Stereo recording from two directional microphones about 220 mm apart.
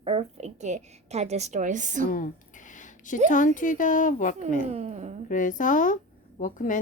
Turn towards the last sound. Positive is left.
turn(degrees=35)  # may be behind; listen again after turning